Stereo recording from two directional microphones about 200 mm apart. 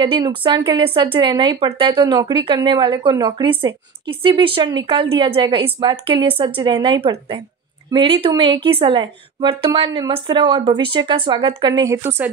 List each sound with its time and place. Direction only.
0.0 s speech: 25° right (ahead or behind)